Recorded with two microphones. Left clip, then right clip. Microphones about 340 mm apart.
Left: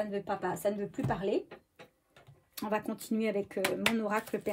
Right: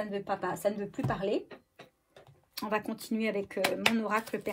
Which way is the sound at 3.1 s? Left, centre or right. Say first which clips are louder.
Even; centre.